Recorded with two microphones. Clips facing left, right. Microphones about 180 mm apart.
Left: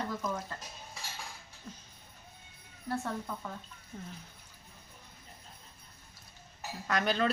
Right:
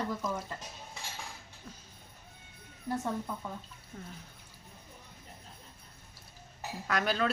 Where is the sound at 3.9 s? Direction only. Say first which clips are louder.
Left 1 dB; centre (ahead or behind).